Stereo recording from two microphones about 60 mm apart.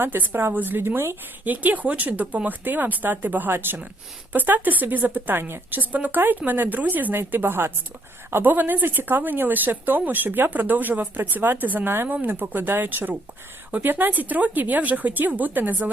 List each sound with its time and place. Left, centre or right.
0.0 s speech: right
1.5 s speech: right
5.4 s a woman's voice: right
5.8 s speech: right